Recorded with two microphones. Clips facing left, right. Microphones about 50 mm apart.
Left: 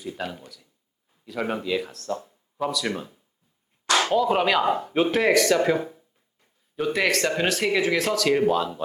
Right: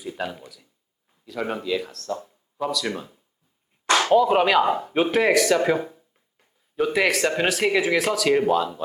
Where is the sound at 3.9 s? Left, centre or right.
Centre.